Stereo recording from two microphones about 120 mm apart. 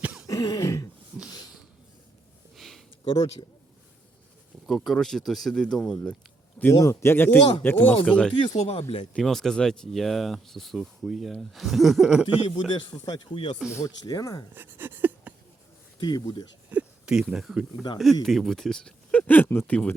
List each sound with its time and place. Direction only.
0.0 s throat clearing: 5° right (ahead or behind)
0.3 s throat clearing: 30° left (ahead or behind)
2.6 s a sound: 5° left (ahead or behind)
3.0 s speech: 50° left (ahead or behind)
4.9 s speech: 5° left (ahead or behind)
6.7 s speech: 25° left (ahead or behind); by 8.3 s 5° left (ahead or behind)
8.5 s speech: 60° left (ahead or behind)
9.1 s speech: 5° left (ahead or behind)
12.5 s speech: 40° left (ahead or behind)
13.7 s speech: 30° left (ahead or behind)
14.5 s a sound: 15° right (ahead or behind)
16.0 s speech: 35° left (ahead or behind)
16.6 s speech: 10° right (ahead or behind); by 19.9 s 10° left (ahead or behind)